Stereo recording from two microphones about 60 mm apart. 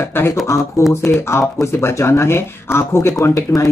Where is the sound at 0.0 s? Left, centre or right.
Left.